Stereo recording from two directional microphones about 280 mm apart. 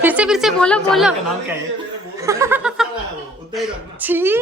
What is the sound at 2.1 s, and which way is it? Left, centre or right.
Laughter, centre.